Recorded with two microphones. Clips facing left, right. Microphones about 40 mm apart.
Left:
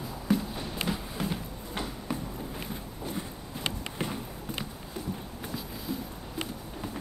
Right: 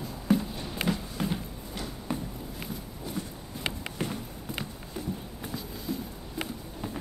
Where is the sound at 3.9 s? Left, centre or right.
Centre.